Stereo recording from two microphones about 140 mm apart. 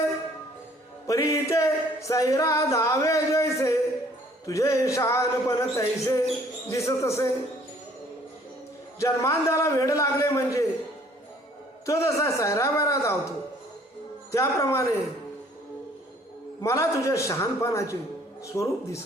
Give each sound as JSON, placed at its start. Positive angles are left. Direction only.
{"t": 1.0, "sound": "singing", "side_deg": 25}
{"t": 9.0, "sound": "singing", "side_deg": 20}
{"t": 11.9, "sound": "singing", "side_deg": 20}
{"t": 14.3, "sound": "singing", "side_deg": 20}
{"t": 16.6, "sound": "singing", "side_deg": 20}